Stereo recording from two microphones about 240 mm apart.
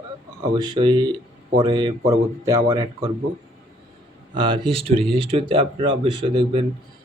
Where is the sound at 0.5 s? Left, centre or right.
Centre.